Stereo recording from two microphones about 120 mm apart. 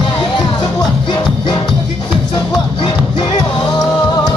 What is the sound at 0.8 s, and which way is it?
Music, 35° left (ahead or behind).